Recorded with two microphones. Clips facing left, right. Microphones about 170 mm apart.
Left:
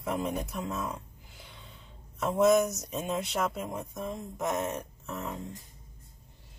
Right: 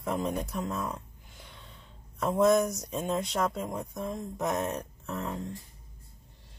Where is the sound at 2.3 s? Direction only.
5° left (ahead or behind).